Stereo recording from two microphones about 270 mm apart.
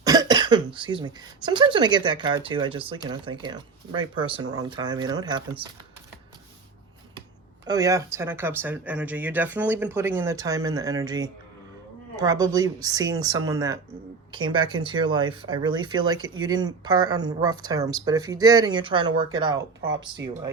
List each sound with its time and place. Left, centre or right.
0.0 s cough: centre
0.8 s speech: centre
7.7 s speech: centre
19.8 s speech: right